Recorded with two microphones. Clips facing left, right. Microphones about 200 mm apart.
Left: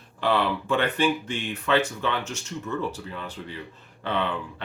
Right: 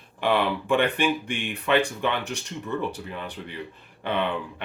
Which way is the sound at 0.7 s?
15° right (ahead or behind).